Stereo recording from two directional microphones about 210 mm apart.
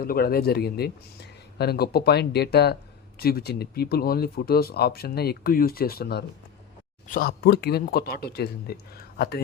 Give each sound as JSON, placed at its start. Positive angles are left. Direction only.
{"t": 0.0, "sound": "speech", "side_deg": 45}